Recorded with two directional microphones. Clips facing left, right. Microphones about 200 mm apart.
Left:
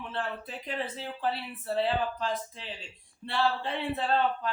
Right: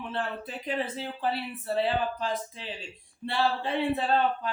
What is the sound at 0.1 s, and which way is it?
Speech, 10° right (ahead or behind).